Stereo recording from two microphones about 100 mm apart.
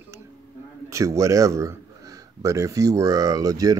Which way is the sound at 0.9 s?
30° right (ahead or behind).